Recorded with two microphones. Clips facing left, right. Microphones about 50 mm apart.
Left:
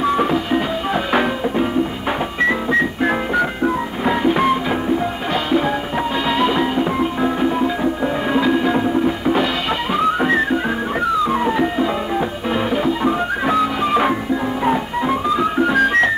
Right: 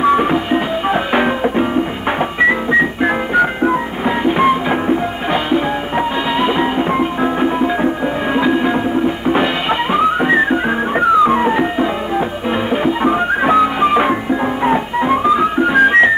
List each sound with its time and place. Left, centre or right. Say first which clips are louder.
0.0 s music: right 4 dB; right